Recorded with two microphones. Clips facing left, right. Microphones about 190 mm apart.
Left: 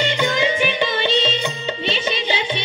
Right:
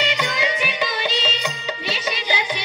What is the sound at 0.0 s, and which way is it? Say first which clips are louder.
Music: left 4 dB; 30° left (ahead or behind).